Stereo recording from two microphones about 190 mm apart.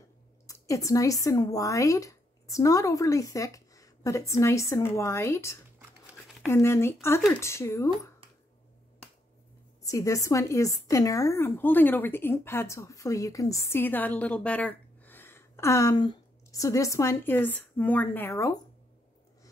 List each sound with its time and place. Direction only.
0.5 s a woman's voice: 15° left (ahead or behind)
9.8 s a woman's voice: 15° left (ahead or behind)